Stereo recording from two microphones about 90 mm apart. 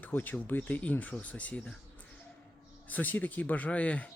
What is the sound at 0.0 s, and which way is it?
Speech, 20° left (ahead or behind).